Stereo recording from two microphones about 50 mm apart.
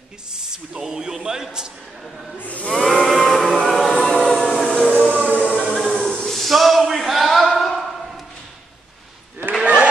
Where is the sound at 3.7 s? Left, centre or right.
Centre.